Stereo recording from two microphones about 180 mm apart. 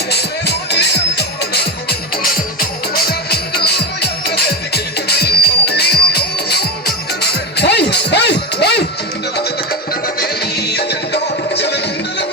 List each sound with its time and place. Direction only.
0.1 s music: 65° left (ahead or behind)
10.7 s music: 65° left (ahead or behind)